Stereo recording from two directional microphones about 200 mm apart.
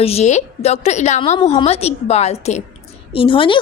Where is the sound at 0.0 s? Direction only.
30° left (ahead or behind).